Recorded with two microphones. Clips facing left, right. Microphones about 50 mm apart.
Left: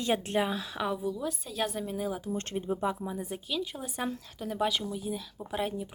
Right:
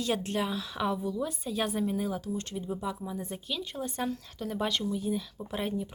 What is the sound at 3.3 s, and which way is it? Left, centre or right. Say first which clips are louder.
Speech: left 2 dB; centre.